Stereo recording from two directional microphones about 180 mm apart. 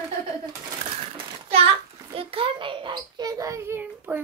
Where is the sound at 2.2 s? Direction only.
30° right (ahead or behind); by 4.2 s 10° right (ahead or behind).